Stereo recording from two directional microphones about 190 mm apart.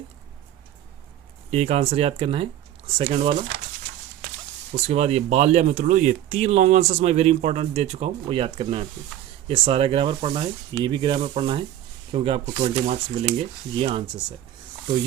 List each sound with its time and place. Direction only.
1.5 s speech: 35° right (ahead or behind)
4.9 s speech: 35° right (ahead or behind)